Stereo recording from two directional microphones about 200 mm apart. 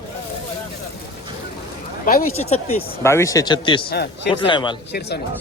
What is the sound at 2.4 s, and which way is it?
Speech, 30° left (ahead or behind).